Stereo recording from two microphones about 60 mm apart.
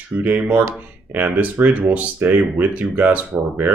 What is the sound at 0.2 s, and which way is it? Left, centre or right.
Speech, right.